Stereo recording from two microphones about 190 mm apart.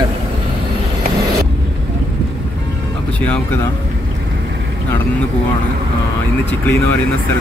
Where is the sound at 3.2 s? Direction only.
10° left (ahead or behind).